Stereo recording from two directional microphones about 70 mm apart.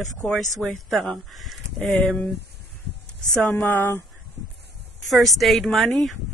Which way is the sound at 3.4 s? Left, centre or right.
Left.